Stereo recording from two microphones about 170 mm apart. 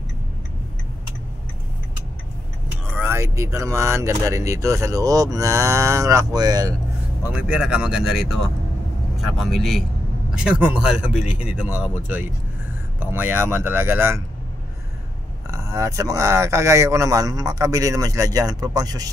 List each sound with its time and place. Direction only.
2.9 s speech: 15° right (ahead or behind)
7.3 s a man's voice: 5° right (ahead or behind)
15.5 s speech: 15° right (ahead or behind)